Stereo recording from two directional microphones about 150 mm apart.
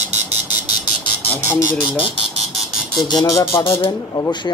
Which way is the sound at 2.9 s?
25° left (ahead or behind).